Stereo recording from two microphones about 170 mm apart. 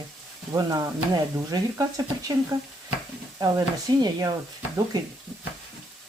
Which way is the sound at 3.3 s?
25° right (ahead or behind).